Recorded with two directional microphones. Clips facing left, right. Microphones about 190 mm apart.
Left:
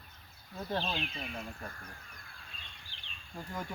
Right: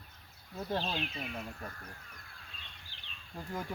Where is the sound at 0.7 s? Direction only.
10° right (ahead or behind).